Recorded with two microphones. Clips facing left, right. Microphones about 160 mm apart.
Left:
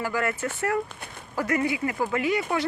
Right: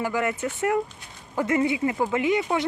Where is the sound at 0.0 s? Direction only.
20° right (ahead or behind).